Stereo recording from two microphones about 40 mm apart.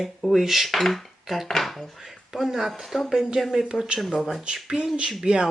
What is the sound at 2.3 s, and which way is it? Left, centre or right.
Speech, centre.